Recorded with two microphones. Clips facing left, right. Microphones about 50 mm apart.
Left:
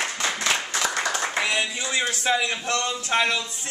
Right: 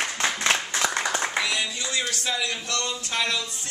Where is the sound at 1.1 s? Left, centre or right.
Right.